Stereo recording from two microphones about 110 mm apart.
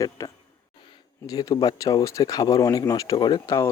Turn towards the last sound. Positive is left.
turn(degrees=25)  # may be behind; listen again after turning